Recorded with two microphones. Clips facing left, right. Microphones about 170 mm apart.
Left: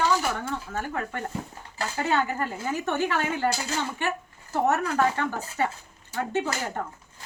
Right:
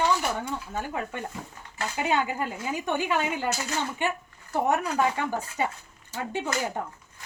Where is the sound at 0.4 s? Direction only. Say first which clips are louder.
Left 1 dB; 15° right (ahead or behind).